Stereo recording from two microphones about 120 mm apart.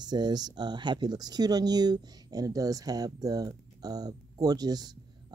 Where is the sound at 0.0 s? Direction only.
35° right (ahead or behind).